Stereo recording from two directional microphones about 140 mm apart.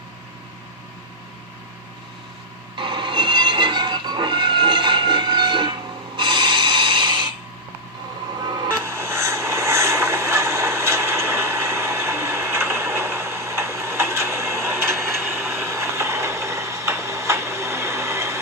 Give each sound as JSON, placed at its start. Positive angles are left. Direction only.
{"t": 2.7, "sound": "train", "side_deg": -35}
{"t": 6.1, "sound": "a sound", "side_deg": -35}
{"t": 8.4, "sound": "vehicle", "side_deg": -30}
{"t": 8.6, "sound": "vehicle", "side_deg": -20}